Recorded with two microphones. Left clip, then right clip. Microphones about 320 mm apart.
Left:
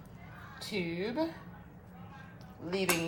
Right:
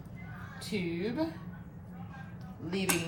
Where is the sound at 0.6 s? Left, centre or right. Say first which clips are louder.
Even; centre.